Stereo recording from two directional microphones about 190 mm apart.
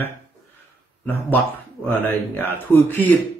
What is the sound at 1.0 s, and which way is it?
Speech, 10° left (ahead or behind).